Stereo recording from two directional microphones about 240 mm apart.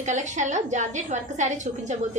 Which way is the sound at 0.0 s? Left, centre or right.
Right.